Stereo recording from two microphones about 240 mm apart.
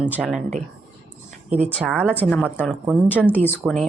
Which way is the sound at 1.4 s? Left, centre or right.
Right.